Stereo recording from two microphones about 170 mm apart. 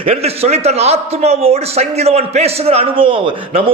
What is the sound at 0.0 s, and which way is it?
A man's voice, 35° right (ahead or behind).